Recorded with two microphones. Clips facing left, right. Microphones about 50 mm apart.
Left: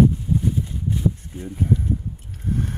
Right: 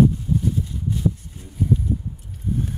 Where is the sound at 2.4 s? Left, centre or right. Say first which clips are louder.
Even; left.